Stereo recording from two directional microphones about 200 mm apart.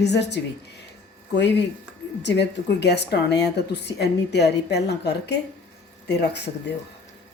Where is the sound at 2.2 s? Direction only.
60° left (ahead or behind).